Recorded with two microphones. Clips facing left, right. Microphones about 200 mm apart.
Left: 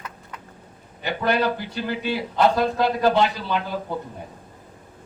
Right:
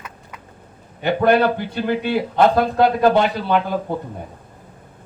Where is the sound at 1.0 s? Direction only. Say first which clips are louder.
Right 7 dB; 55° right (ahead or behind).